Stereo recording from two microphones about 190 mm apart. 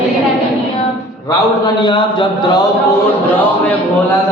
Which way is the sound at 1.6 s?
25° left (ahead or behind).